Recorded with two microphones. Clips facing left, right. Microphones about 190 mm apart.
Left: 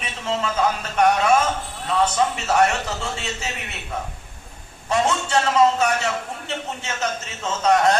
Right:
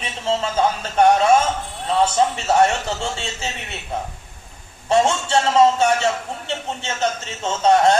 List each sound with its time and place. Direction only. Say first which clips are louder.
0.0 s a man's voice: right 3 dB; 30° right (ahead or behind)
4.9 s a man's voice: right 4 dB; 30° right (ahead or behind)